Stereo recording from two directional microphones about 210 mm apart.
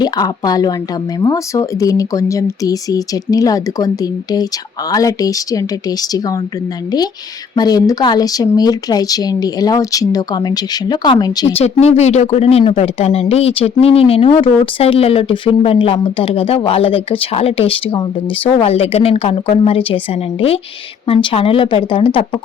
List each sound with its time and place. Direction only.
0.0 s speech: 20° left (ahead or behind)
7.5 s speech: 20° left (ahead or behind)
11.6 s speech: 30° left (ahead or behind)
21.1 s speech: 25° left (ahead or behind)